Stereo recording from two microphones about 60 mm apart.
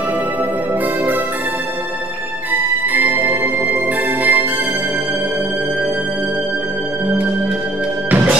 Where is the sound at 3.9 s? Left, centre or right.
Right.